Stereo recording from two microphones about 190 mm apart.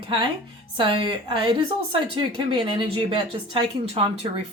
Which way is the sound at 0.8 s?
25° right (ahead or behind).